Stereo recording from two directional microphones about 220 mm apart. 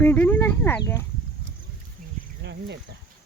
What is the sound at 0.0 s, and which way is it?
Speech, 10° left (ahead or behind).